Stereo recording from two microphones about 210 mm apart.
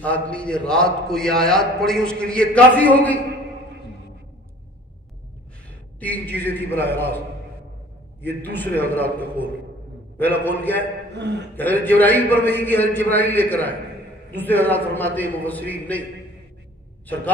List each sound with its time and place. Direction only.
0.0 s a man's voice: 5° left (ahead or behind)
5.9 s a man's voice: 5° left (ahead or behind)
8.2 s a man's voice: 10° left (ahead or behind)
11.1 s a man's voice: 55° right (ahead or behind)
11.5 s a man's voice: 10° left (ahead or behind)